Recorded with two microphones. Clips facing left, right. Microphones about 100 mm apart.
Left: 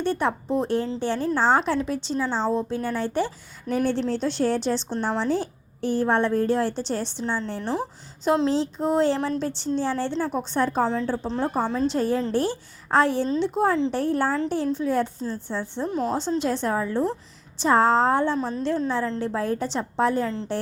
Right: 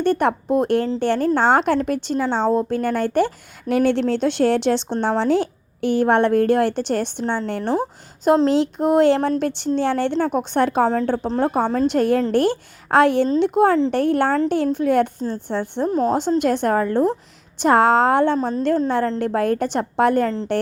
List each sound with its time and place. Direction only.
0.0 s speech: 60° right (ahead or behind)
10.8 s a woman's voice: 50° right (ahead or behind)
15.9 s speech: 40° right (ahead or behind)
16.4 s speech: 60° right (ahead or behind)
17.6 s a woman's voice: 65° right (ahead or behind)